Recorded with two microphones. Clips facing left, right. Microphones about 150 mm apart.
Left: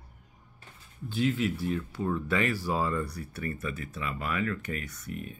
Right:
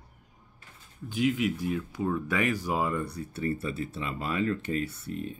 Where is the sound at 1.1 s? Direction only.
15° right (ahead or behind).